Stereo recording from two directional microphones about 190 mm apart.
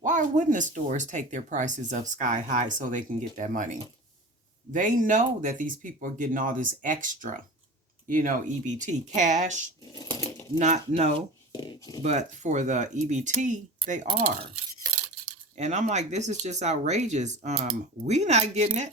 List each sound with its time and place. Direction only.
0.0 s speech: 40° right (ahead or behind)
10.2 s bird: 15° left (ahead or behind)
10.6 s speech: 35° right (ahead or behind)
11.5 s a sound: 20° left (ahead or behind)
12.0 s speech: 40° right (ahead or behind)
15.5 s speech: 40° right (ahead or behind)